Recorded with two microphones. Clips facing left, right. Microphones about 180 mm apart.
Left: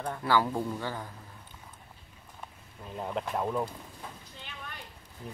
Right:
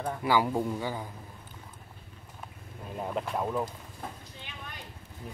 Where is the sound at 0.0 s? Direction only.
10° right (ahead or behind).